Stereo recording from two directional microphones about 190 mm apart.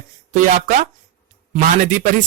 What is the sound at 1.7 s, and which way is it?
Speech, 45° right (ahead or behind).